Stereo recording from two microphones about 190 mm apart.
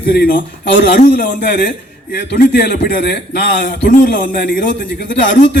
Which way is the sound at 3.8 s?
50° left (ahead or behind).